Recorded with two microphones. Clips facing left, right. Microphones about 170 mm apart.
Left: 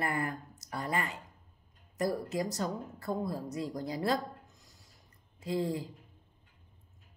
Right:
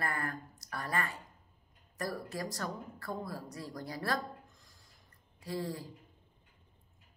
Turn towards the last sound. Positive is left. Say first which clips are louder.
# left 5 dB
turn(degrees=20)  # may be behind; listen again after turning